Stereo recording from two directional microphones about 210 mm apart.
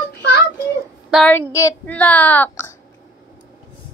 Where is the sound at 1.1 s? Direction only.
Centre (ahead or behind).